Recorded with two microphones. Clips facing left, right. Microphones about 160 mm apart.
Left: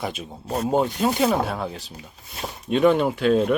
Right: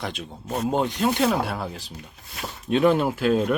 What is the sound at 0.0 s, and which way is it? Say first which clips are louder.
Speech: left 2 dB; 5° left (ahead or behind).